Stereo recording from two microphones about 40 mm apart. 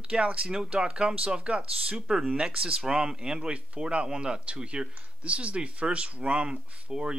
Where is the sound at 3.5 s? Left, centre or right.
Right.